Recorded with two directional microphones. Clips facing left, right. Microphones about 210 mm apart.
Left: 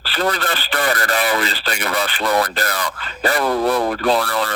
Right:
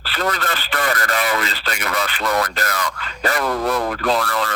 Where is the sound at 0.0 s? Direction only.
30° left (ahead or behind).